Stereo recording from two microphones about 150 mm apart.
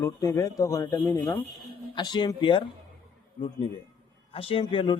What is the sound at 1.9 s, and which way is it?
Speech, 30° left (ahead or behind).